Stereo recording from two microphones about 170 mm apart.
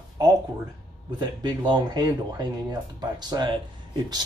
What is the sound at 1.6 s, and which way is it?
Speech, 25° right (ahead or behind).